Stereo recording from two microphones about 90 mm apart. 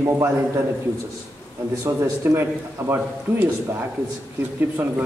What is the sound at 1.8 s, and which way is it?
A man's voice, 25° right (ahead or behind).